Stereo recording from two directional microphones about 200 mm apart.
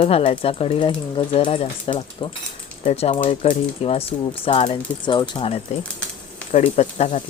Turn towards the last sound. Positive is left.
turn(degrees=35)  # may be behind; listen again after turning